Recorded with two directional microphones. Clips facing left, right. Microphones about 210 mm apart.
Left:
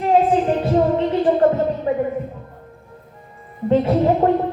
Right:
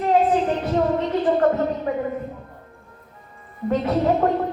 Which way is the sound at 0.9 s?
25° left (ahead or behind).